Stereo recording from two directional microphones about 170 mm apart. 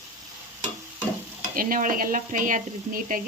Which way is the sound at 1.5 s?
55° right (ahead or behind).